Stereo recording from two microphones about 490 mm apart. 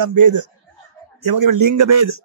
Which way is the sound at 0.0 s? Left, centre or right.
Right.